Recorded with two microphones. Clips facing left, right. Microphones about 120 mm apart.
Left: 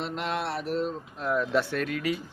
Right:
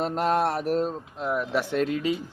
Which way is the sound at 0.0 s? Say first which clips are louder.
Right 7 dB; 45° right (ahead or behind).